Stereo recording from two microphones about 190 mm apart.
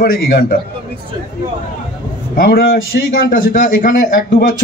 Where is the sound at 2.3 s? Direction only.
50° left (ahead or behind).